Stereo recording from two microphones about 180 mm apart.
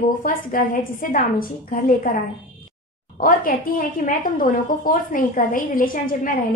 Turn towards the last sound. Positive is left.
turn(degrees=50)  # may be behind; listen again after turning